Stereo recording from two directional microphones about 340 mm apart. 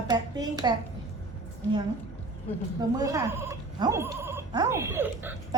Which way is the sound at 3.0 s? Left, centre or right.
Centre.